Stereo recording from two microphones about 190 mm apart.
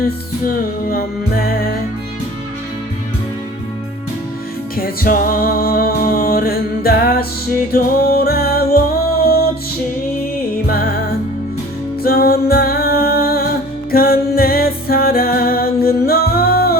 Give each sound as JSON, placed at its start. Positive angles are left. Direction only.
{"t": 0.4, "sound": "music", "side_deg": 50}
{"t": 4.8, "sound": "music", "side_deg": 45}
{"t": 10.5, "sound": "music", "side_deg": 50}
{"t": 12.0, "sound": "music", "side_deg": 55}